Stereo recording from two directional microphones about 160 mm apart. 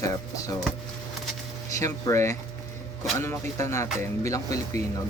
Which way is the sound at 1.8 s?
20° left (ahead or behind).